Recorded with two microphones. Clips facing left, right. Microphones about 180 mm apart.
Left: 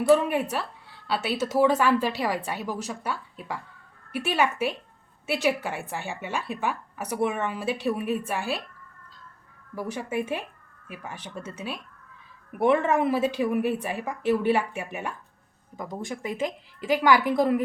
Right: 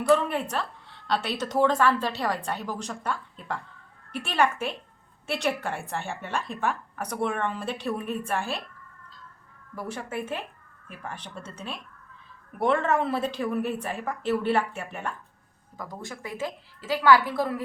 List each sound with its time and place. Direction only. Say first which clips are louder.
0.1 s a woman's voice: left 2 dB; 10° left (ahead or behind)
9.7 s a woman's voice: left 4 dB; 10° left (ahead or behind)